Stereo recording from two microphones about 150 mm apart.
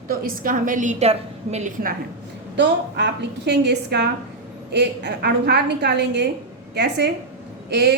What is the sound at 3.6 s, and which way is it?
Speech, 90° right.